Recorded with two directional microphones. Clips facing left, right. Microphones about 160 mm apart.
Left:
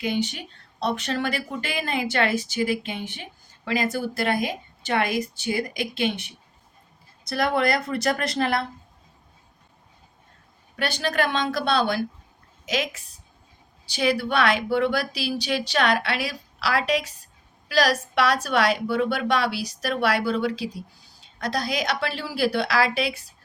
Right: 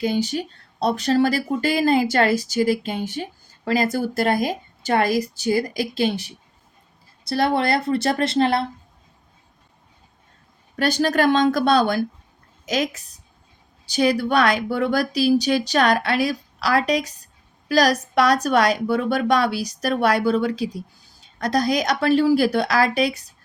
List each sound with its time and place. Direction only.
0.0 s speech: 35° right (ahead or behind)
10.8 s a woman's voice: 40° right (ahead or behind)